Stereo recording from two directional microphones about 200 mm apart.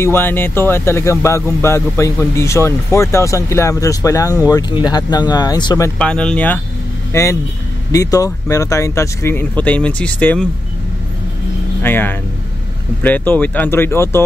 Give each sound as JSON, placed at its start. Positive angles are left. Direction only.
{"t": 0.0, "sound": "speech", "side_deg": 10}
{"t": 5.9, "sound": "speech", "side_deg": 5}
{"t": 11.8, "sound": "speech", "side_deg": 10}